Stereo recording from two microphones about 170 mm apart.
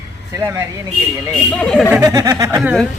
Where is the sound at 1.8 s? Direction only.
10° right (ahead or behind).